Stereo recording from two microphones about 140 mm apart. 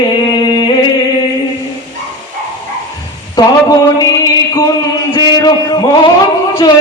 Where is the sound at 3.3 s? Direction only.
25° left (ahead or behind).